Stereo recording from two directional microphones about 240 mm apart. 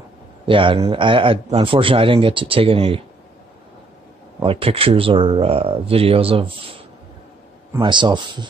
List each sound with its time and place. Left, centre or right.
0.5 s a man's voice: right
4.4 s a man's voice: right
7.7 s a man's voice: centre